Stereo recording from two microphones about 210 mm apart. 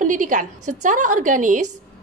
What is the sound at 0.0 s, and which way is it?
A woman's voice, 40° right (ahead or behind).